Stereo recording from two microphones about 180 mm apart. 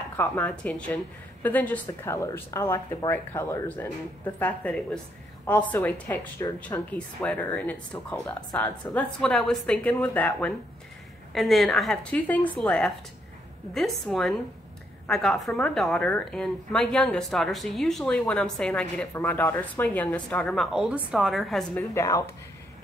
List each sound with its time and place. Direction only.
0.2 s a woman's voice: 10° left (ahead or behind)
21.9 s a woman's voice: 15° left (ahead or behind)